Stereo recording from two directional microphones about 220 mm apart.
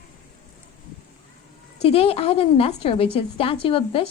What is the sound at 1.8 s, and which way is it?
A woman's voice, 25° left (ahead or behind).